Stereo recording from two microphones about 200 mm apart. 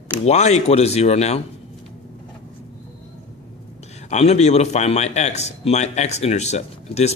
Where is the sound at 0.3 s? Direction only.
35° left (ahead or behind).